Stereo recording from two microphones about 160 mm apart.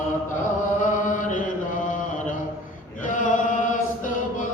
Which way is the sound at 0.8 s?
50° left (ahead or behind).